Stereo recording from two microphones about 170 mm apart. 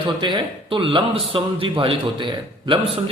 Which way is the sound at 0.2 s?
30° right (ahead or behind).